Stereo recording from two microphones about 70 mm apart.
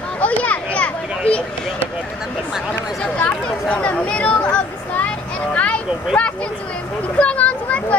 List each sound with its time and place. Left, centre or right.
0.2 s children playing: left
3.0 s speech: centre
7.2 s speech: centre